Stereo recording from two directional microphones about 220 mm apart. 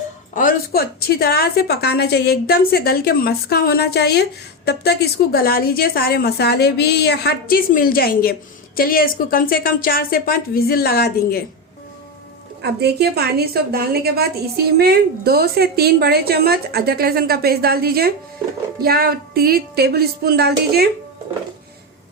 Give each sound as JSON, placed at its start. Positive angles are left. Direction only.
{"t": 0.3, "sound": "a woman's voice", "side_deg": 40}
{"t": 12.6, "sound": "a woman's voice", "side_deg": -50}